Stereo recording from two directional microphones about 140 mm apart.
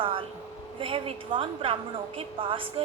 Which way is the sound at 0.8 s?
40° right (ahead or behind).